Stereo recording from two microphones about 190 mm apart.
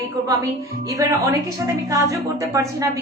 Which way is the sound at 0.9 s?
15° right (ahead or behind).